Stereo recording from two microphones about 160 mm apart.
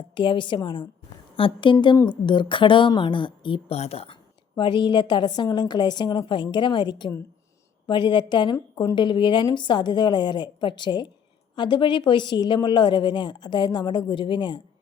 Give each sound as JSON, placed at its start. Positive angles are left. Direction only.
{"t": 0.1, "sound": "a woman's voice", "side_deg": 30}